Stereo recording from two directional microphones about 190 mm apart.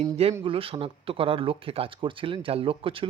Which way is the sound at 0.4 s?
30° right (ahead or behind).